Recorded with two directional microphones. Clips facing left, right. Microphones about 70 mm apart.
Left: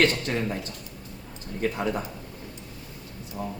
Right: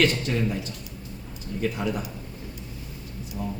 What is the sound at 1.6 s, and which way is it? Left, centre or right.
Speech, left.